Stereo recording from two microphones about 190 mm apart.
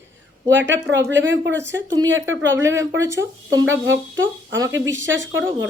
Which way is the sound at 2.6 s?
15° right (ahead or behind).